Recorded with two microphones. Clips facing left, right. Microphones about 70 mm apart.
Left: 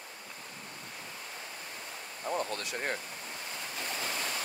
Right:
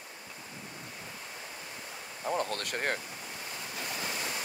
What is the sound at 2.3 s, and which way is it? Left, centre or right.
Speech, right.